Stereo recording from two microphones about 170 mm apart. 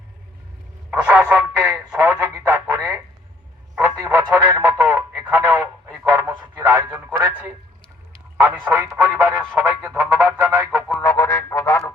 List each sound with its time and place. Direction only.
0.9 s speech: 5° right (ahead or behind)
8.7 s speech: 15° right (ahead or behind)
11.0 s music: 15° left (ahead or behind)